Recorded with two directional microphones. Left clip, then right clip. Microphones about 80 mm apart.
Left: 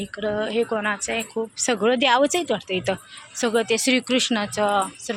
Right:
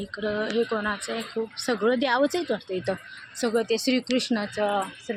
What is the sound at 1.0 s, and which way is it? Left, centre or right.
Speech, centre.